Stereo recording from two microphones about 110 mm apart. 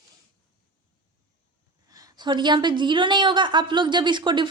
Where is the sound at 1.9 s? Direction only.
35° right (ahead or behind).